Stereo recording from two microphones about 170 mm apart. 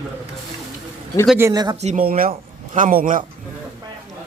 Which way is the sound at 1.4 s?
20° right (ahead or behind).